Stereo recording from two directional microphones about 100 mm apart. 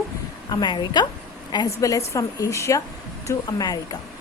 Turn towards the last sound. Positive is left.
turn(degrees=40)  # may be behind; listen again after turning